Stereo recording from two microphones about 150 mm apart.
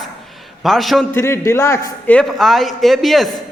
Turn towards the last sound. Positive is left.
turn(degrees=0)  # may be behind; listen again after turning